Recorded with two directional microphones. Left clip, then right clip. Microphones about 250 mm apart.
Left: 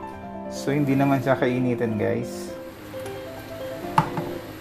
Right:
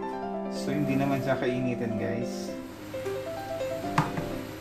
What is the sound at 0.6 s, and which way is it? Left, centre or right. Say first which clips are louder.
Speech: left 7 dB; left.